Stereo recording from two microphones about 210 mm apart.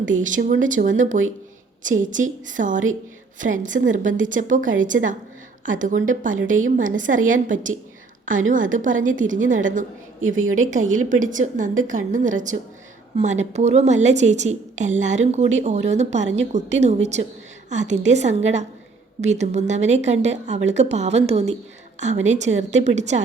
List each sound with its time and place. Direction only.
0.1 s speech: 40° right (ahead or behind)